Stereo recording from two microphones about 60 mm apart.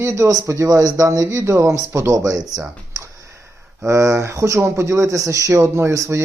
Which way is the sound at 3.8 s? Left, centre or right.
Right.